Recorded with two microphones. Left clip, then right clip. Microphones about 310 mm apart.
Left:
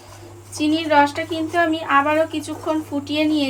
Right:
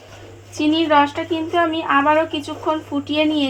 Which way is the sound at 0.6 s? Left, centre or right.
Centre.